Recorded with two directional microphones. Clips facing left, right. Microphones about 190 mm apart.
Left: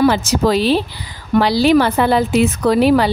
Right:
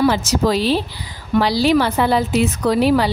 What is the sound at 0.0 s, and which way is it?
Speech, 60° left (ahead or behind).